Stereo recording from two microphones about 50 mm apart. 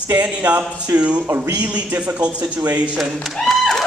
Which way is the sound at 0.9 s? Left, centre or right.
Right.